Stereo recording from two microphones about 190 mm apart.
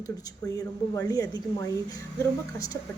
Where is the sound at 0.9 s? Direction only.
15° left (ahead or behind).